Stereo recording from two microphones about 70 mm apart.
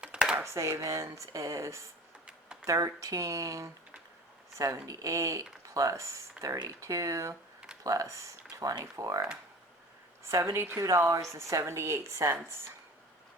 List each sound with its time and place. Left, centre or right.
0.0 s a sound: centre
0.4 s speech: right
10.8 s speech: right